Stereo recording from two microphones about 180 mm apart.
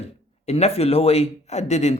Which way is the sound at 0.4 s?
35° left (ahead or behind).